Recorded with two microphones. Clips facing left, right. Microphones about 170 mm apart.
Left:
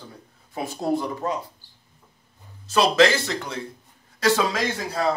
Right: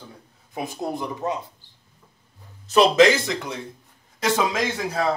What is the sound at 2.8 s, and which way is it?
A man's voice, 15° right (ahead or behind).